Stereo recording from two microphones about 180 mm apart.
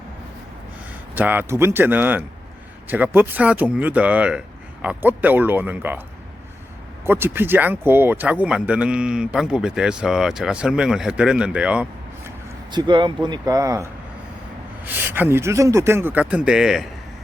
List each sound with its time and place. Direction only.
1.1 s speech: 10° right (ahead or behind)
7.0 s speech: 10° right (ahead or behind)
12.7 s speech: 25° right (ahead or behind)
14.8 s speech: 10° right (ahead or behind)